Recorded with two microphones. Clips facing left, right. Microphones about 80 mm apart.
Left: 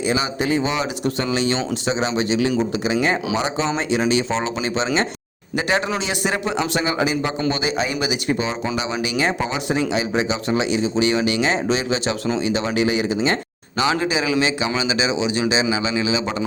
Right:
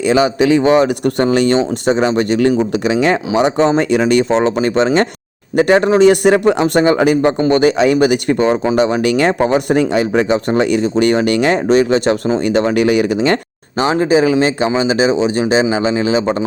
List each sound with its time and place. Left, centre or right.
0.1 s speech: right
2.9 s speech: right
13.9 s speech: right